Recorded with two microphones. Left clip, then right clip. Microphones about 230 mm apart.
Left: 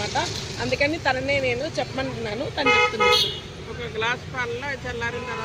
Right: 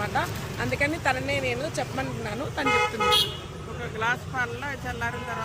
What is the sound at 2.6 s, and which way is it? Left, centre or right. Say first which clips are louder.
Speech: left 5 dB; right.